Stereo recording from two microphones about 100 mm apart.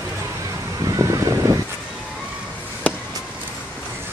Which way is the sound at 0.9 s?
35° right (ahead or behind).